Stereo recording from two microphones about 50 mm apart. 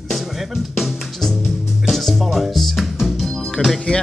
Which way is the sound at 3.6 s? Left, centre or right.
Left.